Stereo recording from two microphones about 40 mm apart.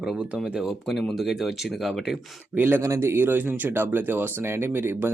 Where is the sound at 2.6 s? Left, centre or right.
Right.